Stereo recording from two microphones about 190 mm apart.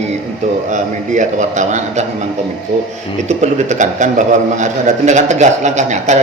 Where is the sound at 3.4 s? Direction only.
40° right (ahead or behind).